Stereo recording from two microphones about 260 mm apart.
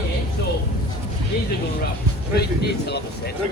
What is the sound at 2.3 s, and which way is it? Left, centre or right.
Speech, left.